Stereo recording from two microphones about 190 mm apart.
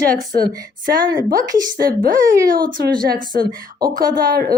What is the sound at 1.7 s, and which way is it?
A woman's voice, 50° right (ahead or behind).